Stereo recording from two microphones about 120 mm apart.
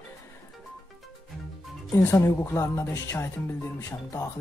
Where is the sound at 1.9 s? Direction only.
20° left (ahead or behind).